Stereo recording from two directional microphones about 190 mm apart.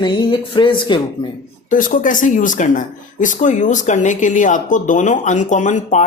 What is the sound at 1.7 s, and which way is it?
Speech, 45° left (ahead or behind).